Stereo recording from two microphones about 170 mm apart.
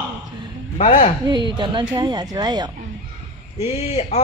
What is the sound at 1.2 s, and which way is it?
A man's voice, 30° right (ahead or behind).